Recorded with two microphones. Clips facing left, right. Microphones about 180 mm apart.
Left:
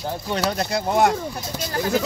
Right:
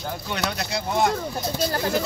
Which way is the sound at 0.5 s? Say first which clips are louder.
Left 4 dB; 50° left (ahead or behind).